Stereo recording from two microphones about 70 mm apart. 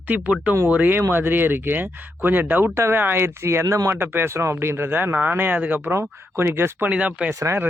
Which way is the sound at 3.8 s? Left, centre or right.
Right.